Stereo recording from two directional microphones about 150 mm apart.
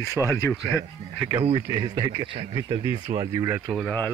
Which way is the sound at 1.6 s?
25° right (ahead or behind).